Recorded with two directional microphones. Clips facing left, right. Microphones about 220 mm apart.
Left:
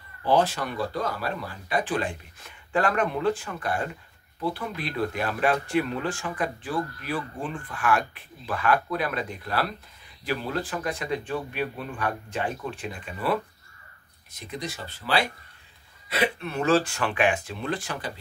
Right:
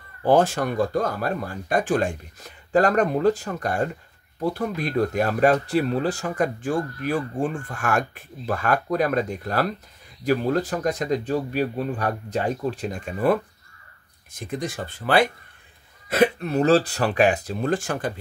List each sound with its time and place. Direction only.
0.2 s a man's voice: 50° right (ahead or behind)